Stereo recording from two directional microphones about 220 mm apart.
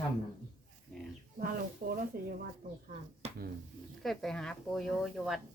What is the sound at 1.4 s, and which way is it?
Speech, 40° right (ahead or behind).